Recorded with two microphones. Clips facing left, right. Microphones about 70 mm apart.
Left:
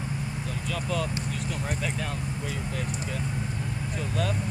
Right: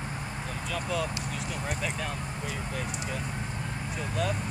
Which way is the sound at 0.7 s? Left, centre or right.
Centre.